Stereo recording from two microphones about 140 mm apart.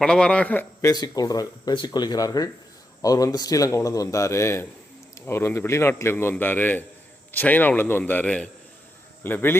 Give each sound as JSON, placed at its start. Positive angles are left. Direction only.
{"t": 0.0, "sound": "a man's voice", "side_deg": 5}
{"t": 0.9, "sound": "a man's voice", "side_deg": 25}